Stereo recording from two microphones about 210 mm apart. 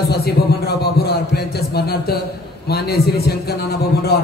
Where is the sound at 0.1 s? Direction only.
50° left (ahead or behind).